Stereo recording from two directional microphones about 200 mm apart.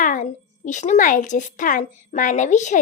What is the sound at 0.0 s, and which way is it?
A child's voice, 40° left (ahead or behind).